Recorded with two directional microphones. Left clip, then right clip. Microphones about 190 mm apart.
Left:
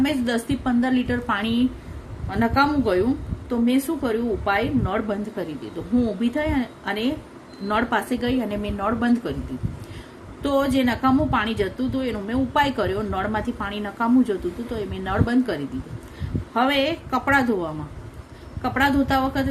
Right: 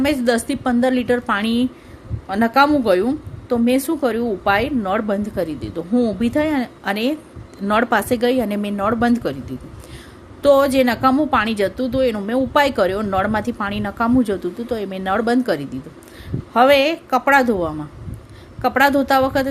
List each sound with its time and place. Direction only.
0.0 s a woman's voice: 55° right (ahead or behind)
10.4 s a woman's voice: 55° right (ahead or behind)